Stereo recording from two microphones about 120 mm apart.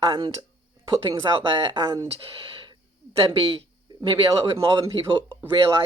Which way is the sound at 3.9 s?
35° right (ahead or behind).